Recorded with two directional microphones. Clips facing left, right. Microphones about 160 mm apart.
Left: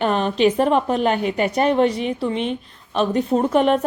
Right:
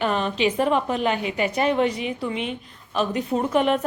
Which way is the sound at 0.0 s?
40° left (ahead or behind).